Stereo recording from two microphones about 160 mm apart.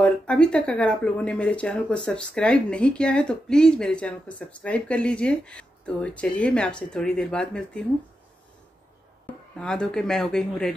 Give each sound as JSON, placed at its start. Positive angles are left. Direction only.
{"t": 0.0, "sound": "speech", "side_deg": 5}
{"t": 9.6, "sound": "speech", "side_deg": 5}